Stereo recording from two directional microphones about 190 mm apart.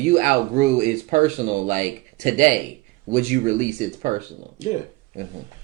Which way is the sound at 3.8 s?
40° right (ahead or behind).